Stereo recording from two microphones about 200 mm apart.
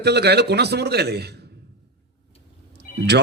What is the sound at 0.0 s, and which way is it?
A man's voice, 55° right (ahead or behind).